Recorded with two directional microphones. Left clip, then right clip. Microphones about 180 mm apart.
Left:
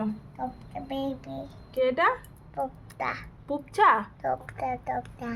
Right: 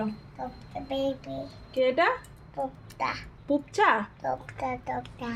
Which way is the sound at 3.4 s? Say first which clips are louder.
Left 2 dB; 15° right (ahead or behind).